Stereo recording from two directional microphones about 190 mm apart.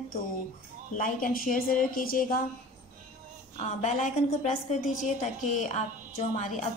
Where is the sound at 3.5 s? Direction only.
40° left (ahead or behind).